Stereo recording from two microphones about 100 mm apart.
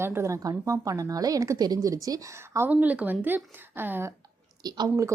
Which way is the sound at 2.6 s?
15° right (ahead or behind).